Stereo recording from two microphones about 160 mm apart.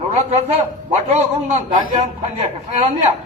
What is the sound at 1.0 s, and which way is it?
A man's voice, 45° right (ahead or behind).